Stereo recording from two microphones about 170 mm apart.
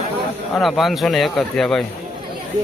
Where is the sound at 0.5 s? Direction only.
Centre (ahead or behind).